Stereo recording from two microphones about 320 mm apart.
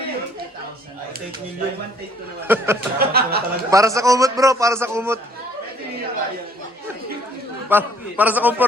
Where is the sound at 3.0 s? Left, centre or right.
Right.